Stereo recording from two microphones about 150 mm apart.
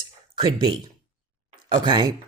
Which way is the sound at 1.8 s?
30° right (ahead or behind).